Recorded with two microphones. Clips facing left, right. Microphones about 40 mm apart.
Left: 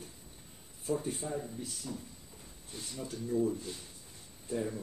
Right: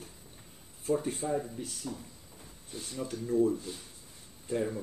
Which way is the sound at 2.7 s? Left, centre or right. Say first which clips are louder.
Right 4 dB; right.